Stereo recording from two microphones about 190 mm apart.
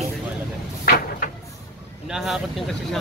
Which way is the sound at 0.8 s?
50° left (ahead or behind).